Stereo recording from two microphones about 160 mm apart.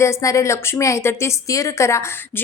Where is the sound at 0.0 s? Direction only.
20° left (ahead or behind).